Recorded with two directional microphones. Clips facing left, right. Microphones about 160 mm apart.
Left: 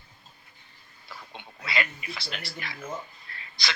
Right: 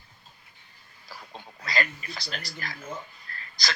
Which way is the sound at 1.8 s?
35° right (ahead or behind).